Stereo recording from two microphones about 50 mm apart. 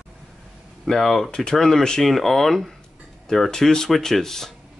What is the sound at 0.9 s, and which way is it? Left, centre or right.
Speech, centre.